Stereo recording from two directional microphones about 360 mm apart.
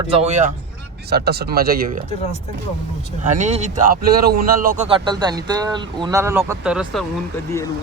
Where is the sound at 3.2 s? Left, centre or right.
Centre.